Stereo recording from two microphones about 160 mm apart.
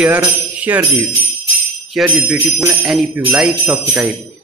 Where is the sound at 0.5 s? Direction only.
10° right (ahead or behind).